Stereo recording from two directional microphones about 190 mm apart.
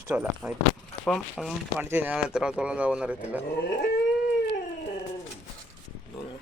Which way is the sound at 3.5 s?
60° left (ahead or behind).